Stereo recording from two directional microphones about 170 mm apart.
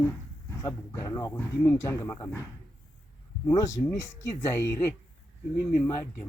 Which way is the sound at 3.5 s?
20° left (ahead or behind).